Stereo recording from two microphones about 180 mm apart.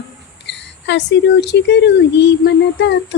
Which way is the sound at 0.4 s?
75° left (ahead or behind).